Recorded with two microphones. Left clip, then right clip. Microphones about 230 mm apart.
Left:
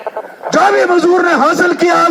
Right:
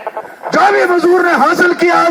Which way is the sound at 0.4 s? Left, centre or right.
Left.